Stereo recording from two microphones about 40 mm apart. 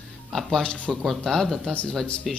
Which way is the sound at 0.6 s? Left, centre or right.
Left.